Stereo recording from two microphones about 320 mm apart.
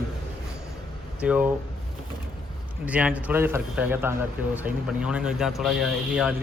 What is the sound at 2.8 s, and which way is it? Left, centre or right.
A man's voice, centre.